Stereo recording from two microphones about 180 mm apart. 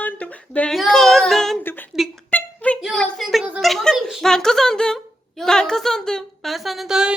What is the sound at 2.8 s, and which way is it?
A child's voice, centre (ahead or behind).